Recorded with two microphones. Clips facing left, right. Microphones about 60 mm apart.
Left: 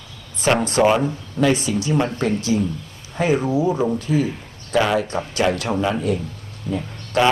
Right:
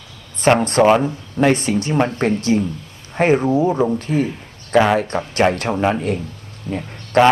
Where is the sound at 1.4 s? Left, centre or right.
Right.